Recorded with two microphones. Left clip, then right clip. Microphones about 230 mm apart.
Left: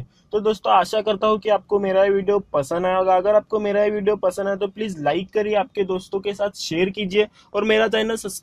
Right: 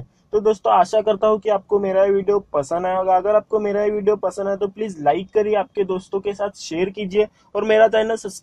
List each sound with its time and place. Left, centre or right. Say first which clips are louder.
0.3 s speech: right 2 dB; left
1.7 s speech: right 2 dB; left